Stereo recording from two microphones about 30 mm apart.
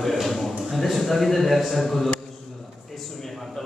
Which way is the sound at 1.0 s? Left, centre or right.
Centre.